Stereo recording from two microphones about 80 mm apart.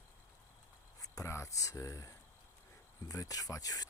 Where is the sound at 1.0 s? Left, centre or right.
Left.